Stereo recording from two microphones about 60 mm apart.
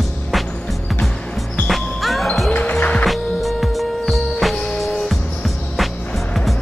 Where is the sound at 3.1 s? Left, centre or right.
Centre.